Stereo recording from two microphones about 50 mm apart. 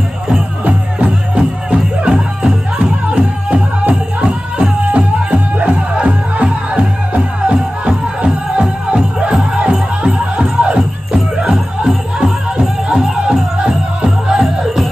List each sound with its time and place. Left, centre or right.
0.7 s music: right
12.2 s music: centre